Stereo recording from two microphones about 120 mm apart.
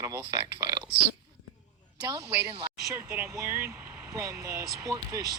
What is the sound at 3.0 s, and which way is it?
Speech, 15° right (ahead or behind).